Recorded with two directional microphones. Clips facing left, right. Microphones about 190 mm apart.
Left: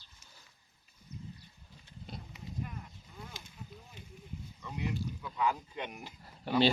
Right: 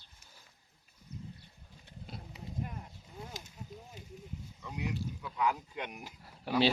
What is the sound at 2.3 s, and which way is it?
Horse, 35° right (ahead or behind).